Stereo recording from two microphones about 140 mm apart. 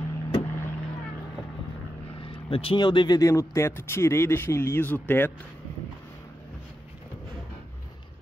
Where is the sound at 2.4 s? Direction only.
40° left (ahead or behind); by 5.5 s 15° left (ahead or behind).